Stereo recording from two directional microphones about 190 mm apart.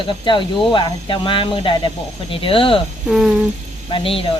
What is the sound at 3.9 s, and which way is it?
Speech, 30° left (ahead or behind).